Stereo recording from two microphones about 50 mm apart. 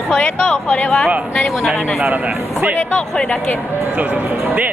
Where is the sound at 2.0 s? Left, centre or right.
Right.